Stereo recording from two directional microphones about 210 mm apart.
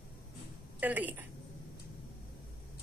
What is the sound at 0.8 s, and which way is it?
Speech, 10° right (ahead or behind).